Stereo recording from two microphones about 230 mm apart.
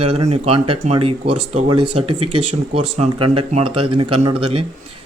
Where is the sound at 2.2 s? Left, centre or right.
Right.